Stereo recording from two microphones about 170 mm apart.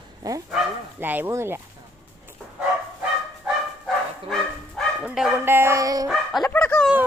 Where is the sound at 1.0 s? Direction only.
10° right (ahead or behind).